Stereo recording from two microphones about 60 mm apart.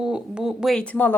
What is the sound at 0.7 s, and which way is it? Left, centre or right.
Speech, left.